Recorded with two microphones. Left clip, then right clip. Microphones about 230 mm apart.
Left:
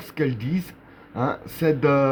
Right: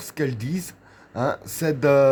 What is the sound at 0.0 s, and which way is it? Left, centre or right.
Speech, right.